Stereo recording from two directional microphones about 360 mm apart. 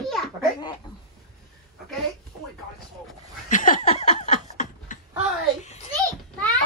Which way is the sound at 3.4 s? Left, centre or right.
Left.